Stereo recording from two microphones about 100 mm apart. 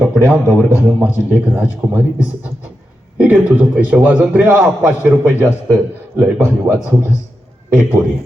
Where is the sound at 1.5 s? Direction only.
15° right (ahead or behind).